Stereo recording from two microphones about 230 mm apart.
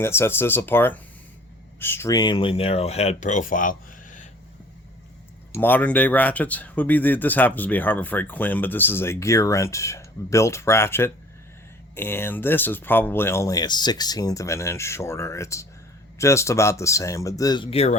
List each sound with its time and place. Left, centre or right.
0.0 s speech: centre; by 4.3 s left
5.5 s speech: centre; by 17.9 s left